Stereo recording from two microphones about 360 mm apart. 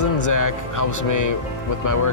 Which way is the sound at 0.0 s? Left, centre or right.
Left.